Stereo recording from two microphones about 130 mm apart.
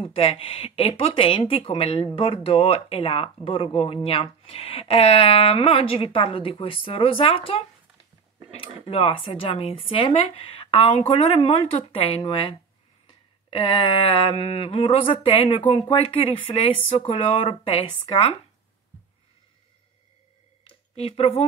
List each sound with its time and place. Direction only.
0.0 s speech: 45° left (ahead or behind)
8.8 s speech: 45° left (ahead or behind)
20.6 s a sound: 50° left (ahead or behind)